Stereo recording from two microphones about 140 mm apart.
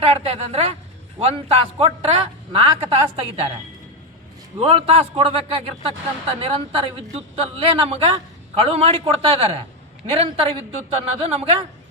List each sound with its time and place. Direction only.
0.0 s speech: 45° right (ahead or behind)
4.5 s speech: 40° right (ahead or behind)